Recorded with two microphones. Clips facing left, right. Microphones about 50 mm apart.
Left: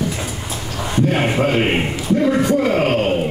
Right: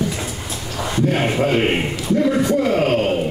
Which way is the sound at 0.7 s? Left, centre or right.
Centre.